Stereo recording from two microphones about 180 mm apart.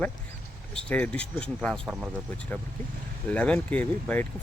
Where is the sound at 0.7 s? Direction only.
5° left (ahead or behind).